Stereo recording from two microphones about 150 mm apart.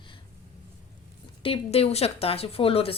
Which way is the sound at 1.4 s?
40° left (ahead or behind).